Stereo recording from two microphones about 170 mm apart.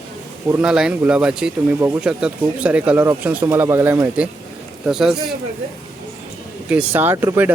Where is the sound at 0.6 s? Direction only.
5° right (ahead or behind).